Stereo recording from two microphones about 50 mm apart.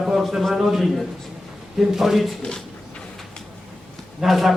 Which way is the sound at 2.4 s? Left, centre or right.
Centre.